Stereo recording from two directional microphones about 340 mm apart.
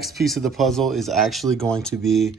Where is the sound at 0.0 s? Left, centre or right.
Centre.